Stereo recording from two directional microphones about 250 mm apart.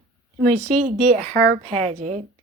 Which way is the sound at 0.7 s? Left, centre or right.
Right.